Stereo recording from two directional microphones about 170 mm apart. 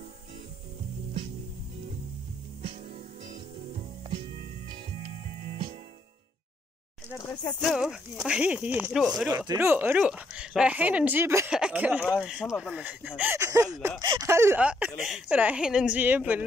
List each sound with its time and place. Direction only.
5.4 s music: 35° right (ahead or behind)
7.2 s speech: 20° left (ahead or behind)
7.6 s speech: centre (ahead or behind)